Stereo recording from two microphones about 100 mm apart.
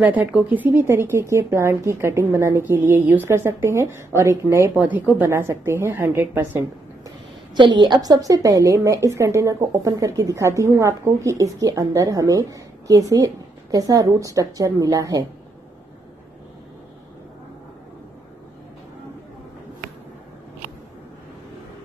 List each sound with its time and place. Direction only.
0.0 s a woman's voice: 15° right (ahead or behind)
4.8 s a woman's voice: 15° right (ahead or behind)
5.3 s a woman's voice: 25° right (ahead or behind)
7.5 s a woman's voice: 50° right (ahead or behind)